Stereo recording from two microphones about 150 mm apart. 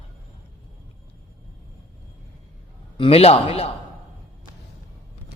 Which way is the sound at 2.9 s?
40° left (ahead or behind).